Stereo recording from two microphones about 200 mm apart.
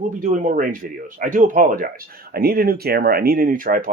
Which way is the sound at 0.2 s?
40° right (ahead or behind).